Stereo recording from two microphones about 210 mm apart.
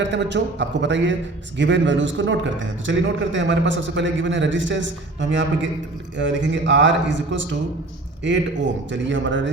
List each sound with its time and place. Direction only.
0.0 s a man's voice: 55° right (ahead or behind)